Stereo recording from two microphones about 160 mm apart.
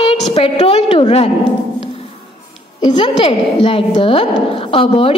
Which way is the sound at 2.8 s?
25° left (ahead or behind).